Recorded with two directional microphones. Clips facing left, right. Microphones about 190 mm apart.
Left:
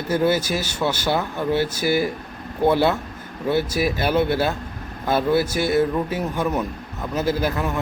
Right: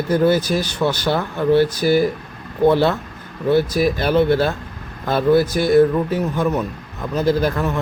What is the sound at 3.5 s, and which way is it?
Speech, 45° right (ahead or behind).